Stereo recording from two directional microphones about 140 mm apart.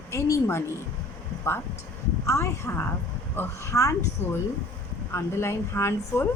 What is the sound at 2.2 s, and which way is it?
A woman's voice, 20° left (ahead or behind).